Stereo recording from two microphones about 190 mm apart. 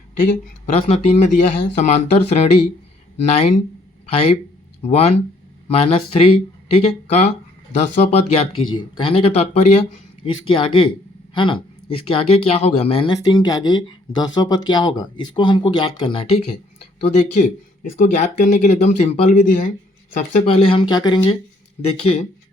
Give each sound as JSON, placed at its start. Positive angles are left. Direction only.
{"t": 0.2, "sound": "speech", "side_deg": 40}
{"t": 4.8, "sound": "speech", "side_deg": 35}